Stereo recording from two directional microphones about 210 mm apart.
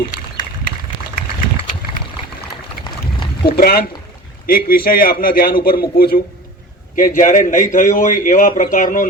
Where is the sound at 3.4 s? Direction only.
45° left (ahead or behind).